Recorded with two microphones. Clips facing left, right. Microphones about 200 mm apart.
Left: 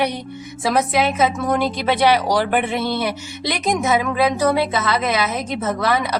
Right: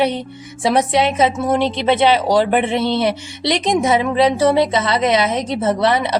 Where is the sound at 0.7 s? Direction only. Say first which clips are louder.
Right 3 dB; 25° right (ahead or behind).